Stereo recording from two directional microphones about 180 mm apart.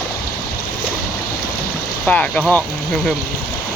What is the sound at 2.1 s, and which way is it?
Speech, 10° left (ahead or behind).